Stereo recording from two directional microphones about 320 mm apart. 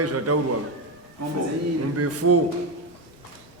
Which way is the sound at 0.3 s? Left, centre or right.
Right.